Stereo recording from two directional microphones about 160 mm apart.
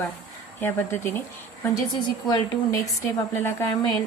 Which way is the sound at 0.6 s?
15° left (ahead or behind).